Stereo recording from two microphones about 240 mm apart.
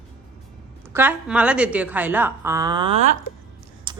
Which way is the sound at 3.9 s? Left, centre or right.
Centre.